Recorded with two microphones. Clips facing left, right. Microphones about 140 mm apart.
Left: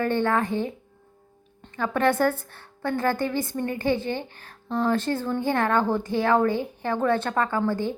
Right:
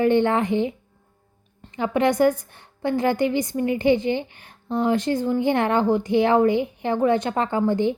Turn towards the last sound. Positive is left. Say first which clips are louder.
# right 4 dB
turn(degrees=-20)  # may be behind; listen again after turning